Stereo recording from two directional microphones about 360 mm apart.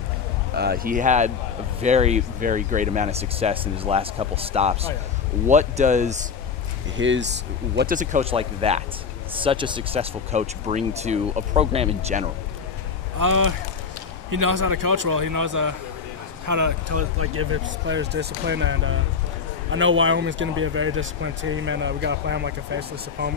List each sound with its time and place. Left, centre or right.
0.6 s speech: right
7.0 s speech: right
13.2 s a man's voice: right
17.2 s speech: right